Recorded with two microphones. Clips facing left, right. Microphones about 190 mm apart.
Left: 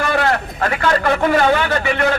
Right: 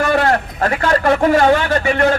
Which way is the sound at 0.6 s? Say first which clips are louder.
Right 1 dB; 40° right (ahead or behind).